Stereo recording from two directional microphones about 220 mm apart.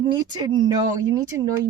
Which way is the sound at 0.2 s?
20° right (ahead or behind).